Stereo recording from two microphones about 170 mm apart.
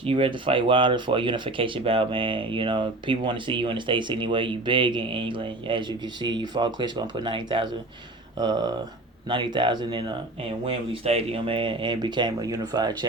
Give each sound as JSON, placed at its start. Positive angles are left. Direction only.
{"t": 0.0, "sound": "speech", "side_deg": -30}